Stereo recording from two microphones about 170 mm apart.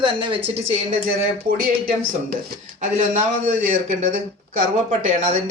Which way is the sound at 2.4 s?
55° right (ahead or behind).